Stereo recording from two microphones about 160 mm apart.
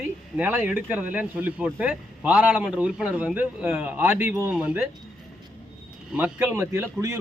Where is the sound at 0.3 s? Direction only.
10° right (ahead or behind).